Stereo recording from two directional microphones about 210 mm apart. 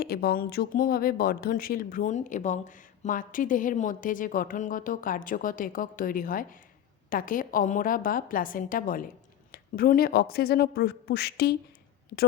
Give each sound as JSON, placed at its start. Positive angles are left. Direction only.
{"t": 0.0, "sound": "speech", "side_deg": 45}